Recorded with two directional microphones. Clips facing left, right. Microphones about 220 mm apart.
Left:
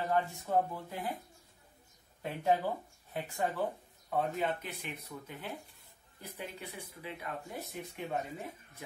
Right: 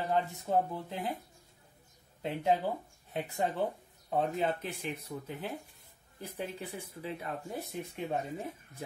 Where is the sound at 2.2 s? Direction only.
15° right (ahead or behind).